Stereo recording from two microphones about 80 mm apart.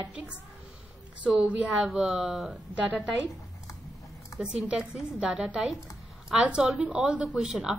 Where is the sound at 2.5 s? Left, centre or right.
Centre.